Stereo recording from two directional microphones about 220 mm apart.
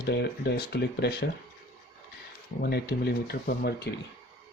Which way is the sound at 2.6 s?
45° left (ahead or behind).